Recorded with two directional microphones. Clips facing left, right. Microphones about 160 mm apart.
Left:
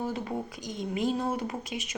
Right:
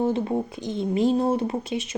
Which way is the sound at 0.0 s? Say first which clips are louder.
Right 9 dB; 25° right (ahead or behind).